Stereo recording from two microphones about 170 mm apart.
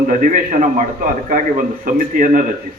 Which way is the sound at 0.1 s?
50° right (ahead or behind).